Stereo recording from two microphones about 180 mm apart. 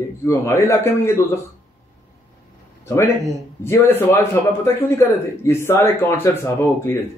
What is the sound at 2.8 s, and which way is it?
A man's voice, 15° left (ahead or behind).